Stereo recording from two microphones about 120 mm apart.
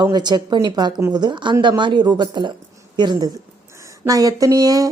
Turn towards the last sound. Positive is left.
turn(degrees=-30)  # may be behind; listen again after turning